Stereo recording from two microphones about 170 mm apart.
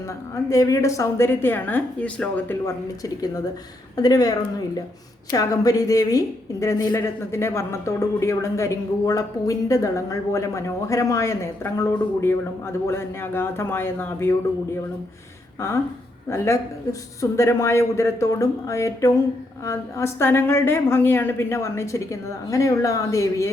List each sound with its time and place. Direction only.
0.5 s a woman's voice: 20° left (ahead or behind)
16.3 s a woman's voice: 15° left (ahead or behind)